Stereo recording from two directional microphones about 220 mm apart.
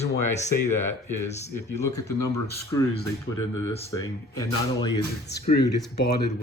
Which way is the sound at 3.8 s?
15° left (ahead or behind).